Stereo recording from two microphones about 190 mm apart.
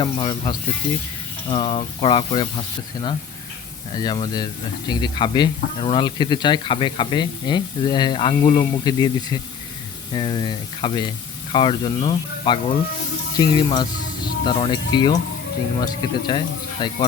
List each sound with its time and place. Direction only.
0.0 s speech: 25° left (ahead or behind)
3.9 s speech: 25° left (ahead or behind)